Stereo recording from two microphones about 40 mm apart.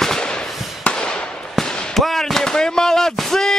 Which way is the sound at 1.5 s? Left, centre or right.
Centre.